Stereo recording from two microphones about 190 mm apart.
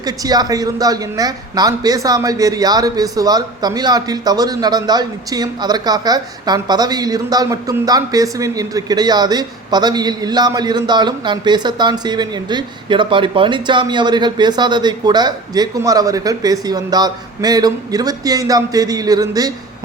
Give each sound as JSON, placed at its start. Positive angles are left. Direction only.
{"t": 0.0, "sound": "speech", "side_deg": -20}